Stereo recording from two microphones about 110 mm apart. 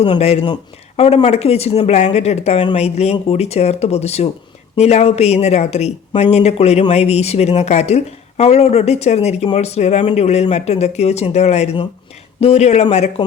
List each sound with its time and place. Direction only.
0.2 s speech: 70° left (ahead or behind)
1.9 s speech: 85° left; by 13.2 s 70° left (ahead or behind)